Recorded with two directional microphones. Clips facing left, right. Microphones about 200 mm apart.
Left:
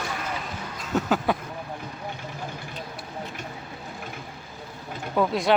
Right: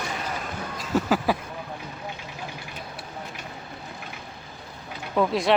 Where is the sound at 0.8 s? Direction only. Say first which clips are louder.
Right 1 dB; centre (ahead or behind).